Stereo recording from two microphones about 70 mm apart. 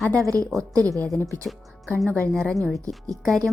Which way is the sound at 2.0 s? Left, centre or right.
Right.